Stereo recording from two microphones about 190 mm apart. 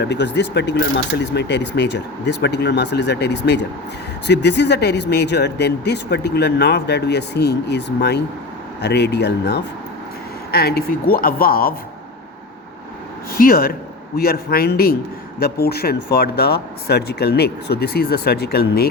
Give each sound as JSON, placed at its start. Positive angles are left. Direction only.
{"t": 0.0, "sound": "a woman's voice", "side_deg": 65}
{"t": 13.3, "sound": "a woman's voice", "side_deg": 50}